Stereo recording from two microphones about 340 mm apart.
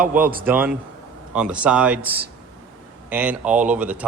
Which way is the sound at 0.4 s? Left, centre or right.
Centre.